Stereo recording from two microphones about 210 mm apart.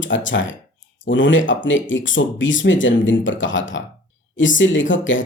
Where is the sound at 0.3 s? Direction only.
65° left (ahead or behind).